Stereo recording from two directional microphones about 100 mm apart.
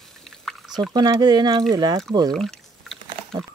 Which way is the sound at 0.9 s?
45° right (ahead or behind).